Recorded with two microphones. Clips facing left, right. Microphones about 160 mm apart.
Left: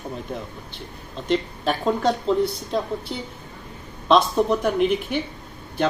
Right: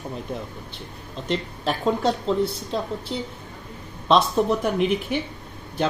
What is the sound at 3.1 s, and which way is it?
Speech, 5° left (ahead or behind).